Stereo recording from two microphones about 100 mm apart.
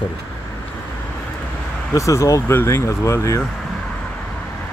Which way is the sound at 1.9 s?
30° left (ahead or behind).